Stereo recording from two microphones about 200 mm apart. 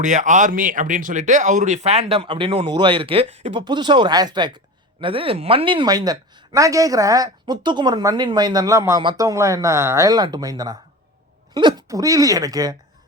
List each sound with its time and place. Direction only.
0.0 s speech: 40° right (ahead or behind); by 12.7 s 20° right (ahead or behind)